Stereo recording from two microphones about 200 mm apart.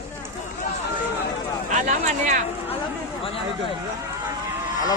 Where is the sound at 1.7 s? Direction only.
35° right (ahead or behind).